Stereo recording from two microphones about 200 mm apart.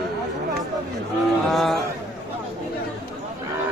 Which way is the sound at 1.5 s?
Centre (ahead or behind).